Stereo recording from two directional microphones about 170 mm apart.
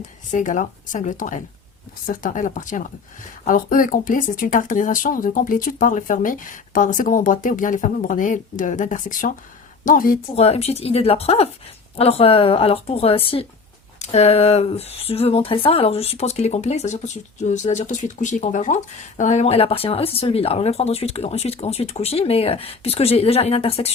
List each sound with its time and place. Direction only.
0.3 s a woman's voice: 50° left (ahead or behind)
10.3 s speech: 35° left (ahead or behind)